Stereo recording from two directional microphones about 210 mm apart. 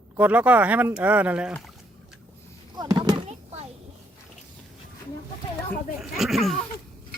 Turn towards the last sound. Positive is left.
turn(degrees=0)  # may be behind; listen again after turning